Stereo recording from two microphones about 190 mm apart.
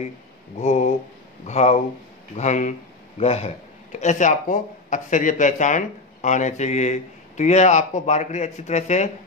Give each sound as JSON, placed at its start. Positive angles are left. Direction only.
{"t": 0.6, "sound": "speech", "side_deg": 35}